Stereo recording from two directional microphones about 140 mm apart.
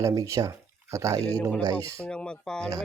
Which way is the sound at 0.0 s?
20° right (ahead or behind).